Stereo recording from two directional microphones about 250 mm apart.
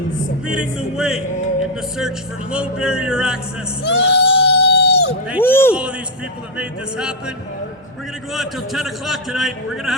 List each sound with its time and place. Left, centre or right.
0.5 s a man's voice: centre
3.8 s crowd: left
5.4 s a man's voice: centre
6.6 s a man's voice: centre
8.3 s a man's voice: centre